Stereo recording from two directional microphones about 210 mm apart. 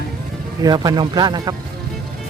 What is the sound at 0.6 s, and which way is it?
Speech, 20° right (ahead or behind).